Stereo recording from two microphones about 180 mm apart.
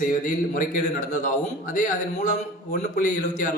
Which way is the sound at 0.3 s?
45° left (ahead or behind).